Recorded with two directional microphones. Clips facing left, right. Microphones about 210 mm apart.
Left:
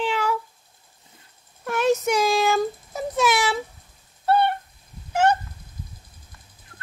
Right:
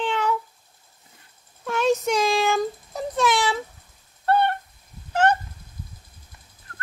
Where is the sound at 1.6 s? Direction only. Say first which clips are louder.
Left 1 dB; 5° left (ahead or behind).